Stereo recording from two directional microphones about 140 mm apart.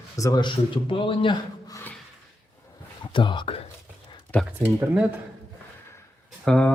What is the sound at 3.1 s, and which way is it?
Speech, 35° left (ahead or behind).